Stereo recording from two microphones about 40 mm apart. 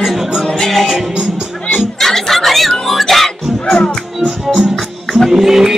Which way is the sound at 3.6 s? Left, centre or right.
Left.